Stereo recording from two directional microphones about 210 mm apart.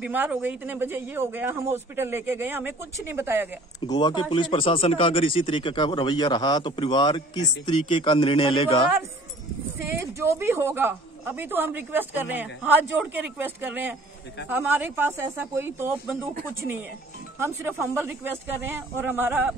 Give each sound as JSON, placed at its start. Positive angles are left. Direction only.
{"t": 0.0, "sound": "speech", "side_deg": -5}
{"t": 3.8, "sound": "speech", "side_deg": 20}
{"t": 9.8, "sound": "speech", "side_deg": -10}
{"t": 17.4, "sound": "speech", "side_deg": -10}